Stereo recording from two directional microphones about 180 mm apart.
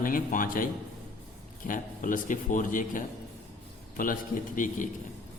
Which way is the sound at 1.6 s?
50° left (ahead or behind).